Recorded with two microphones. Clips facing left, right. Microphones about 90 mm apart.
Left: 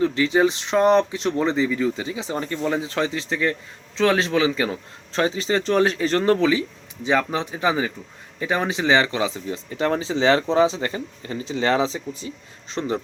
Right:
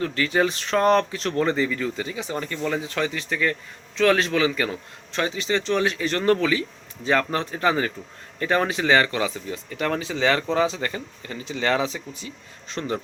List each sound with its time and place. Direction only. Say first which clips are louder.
0.0 s speech: left 4 dB; 20° left (ahead or behind)